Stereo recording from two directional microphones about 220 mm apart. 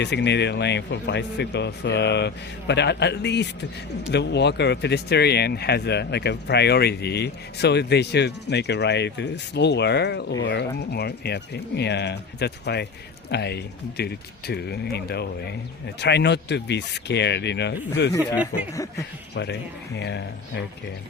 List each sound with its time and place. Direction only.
0.0 s speech: 50° left (ahead or behind)
19.3 s speech: 50° left (ahead or behind)